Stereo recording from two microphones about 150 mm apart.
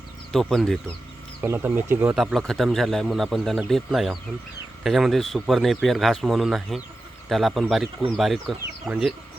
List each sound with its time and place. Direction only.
0.3 s speech: centre (ahead or behind)
1.4 s speech: 15° right (ahead or behind)
2.1 s speech: centre (ahead or behind)